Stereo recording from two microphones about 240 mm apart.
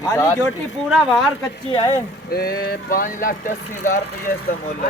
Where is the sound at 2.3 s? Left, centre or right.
Left.